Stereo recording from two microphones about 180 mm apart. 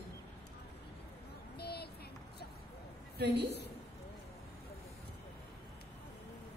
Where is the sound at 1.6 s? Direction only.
60° left (ahead or behind).